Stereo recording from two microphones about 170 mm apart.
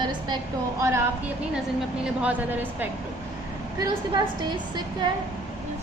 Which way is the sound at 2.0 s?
10° right (ahead or behind).